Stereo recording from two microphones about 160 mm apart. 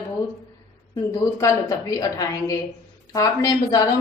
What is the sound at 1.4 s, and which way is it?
A woman's voice, 20° left (ahead or behind).